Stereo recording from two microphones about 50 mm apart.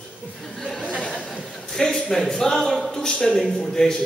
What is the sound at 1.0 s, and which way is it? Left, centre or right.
Chuckle, centre.